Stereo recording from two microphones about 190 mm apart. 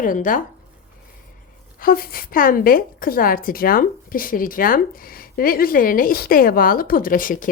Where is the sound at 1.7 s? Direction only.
50° left (ahead or behind).